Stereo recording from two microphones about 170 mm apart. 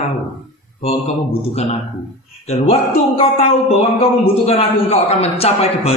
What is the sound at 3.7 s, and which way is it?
A man's voice, 35° left (ahead or behind).